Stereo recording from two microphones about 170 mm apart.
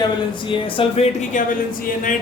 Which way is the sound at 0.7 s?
35° left (ahead or behind).